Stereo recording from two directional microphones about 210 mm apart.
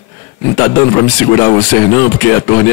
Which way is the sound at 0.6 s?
15° left (ahead or behind).